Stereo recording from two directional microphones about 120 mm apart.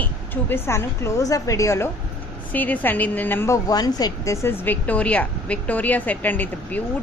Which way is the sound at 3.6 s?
35° left (ahead or behind).